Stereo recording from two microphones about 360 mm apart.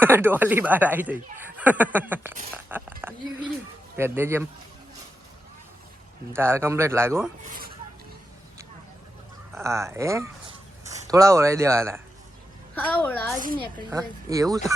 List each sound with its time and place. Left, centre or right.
0.0 s speech: centre
6.3 s speech: centre
7.4 s a sound: right
9.5 s speech: centre
12.7 s speech: centre
13.9 s speech: centre